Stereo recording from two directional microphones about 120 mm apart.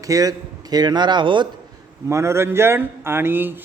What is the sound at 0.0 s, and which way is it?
A man's voice, 30° right (ahead or behind).